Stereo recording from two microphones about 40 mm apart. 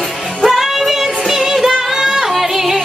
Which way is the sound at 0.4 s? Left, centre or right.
Centre.